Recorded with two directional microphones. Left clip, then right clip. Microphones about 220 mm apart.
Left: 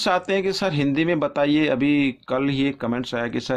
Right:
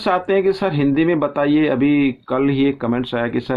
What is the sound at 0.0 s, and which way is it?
Speech, 25° left (ahead or behind).